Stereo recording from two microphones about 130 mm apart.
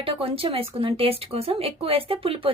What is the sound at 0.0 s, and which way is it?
A woman's voice, 45° right (ahead or behind).